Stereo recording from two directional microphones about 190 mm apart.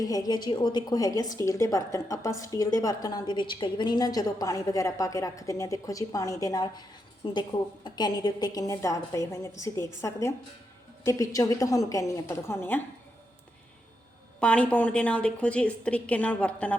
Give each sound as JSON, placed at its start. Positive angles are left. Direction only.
{"t": 0.0, "sound": "a woman's voice", "side_deg": 20}
{"t": 14.4, "sound": "a woman's voice", "side_deg": 5}